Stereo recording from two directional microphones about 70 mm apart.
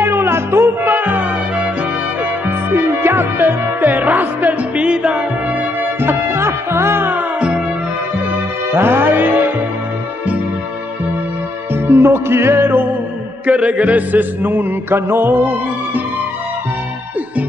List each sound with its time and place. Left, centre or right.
0.0 s music: right
0.9 s music: right
5.8 s music: right
7.3 s music: centre
8.3 s music: right
11.7 s music: right
13.5 s music: centre